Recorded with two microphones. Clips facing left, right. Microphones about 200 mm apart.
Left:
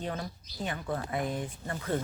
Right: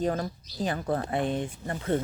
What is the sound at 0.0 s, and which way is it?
Speech, 40° right (ahead or behind).